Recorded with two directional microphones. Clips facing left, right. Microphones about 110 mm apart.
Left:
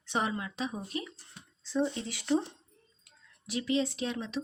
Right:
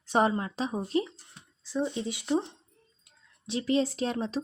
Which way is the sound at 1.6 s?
10° right (ahead or behind).